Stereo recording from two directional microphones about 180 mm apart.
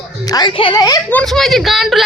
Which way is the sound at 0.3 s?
25° left (ahead or behind).